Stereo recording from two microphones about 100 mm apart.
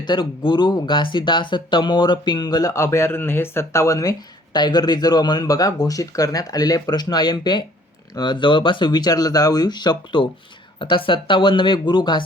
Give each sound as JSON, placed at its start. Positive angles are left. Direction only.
{"t": 0.0, "sound": "speech", "side_deg": 50}
{"t": 4.5, "sound": "speech", "side_deg": 45}